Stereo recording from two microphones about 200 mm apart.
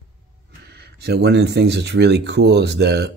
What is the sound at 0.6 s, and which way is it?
Speech, 55° right (ahead or behind).